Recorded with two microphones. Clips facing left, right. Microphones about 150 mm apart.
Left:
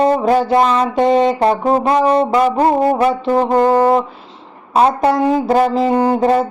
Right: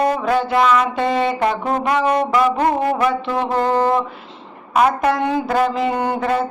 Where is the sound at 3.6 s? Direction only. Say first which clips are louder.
Left 4 dB; 10° left (ahead or behind).